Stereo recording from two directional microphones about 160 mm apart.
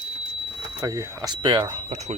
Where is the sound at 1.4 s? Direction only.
30° right (ahead or behind).